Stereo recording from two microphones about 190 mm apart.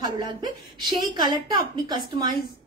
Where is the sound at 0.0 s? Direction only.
20° right (ahead or behind).